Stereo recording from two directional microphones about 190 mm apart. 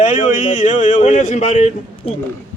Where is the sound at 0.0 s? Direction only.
40° left (ahead or behind).